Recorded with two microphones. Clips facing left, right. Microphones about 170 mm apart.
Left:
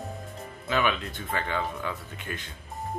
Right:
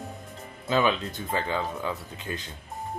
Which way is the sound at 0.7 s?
30° right (ahead or behind).